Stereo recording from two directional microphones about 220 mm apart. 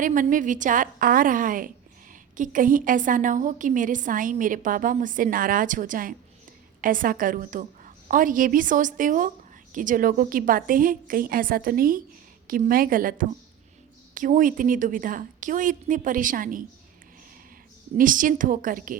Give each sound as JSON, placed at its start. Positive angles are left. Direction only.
{"t": 0.0, "sound": "a woman's voice", "side_deg": -35}
{"t": 17.9, "sound": "a woman's voice", "side_deg": -40}